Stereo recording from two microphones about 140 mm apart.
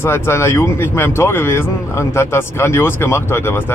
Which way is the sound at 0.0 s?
15° left (ahead or behind).